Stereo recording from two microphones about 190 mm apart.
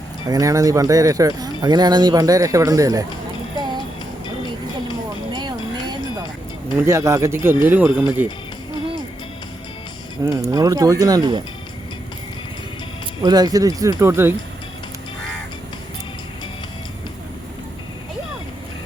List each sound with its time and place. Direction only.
0.3 s speech: 20° right (ahead or behind)
6.7 s speech: 15° right (ahead or behind)
10.2 s speech: 20° right (ahead or behind)
13.2 s speech: 20° right (ahead or behind)